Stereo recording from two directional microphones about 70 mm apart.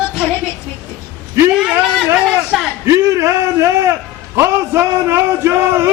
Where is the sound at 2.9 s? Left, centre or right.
Right.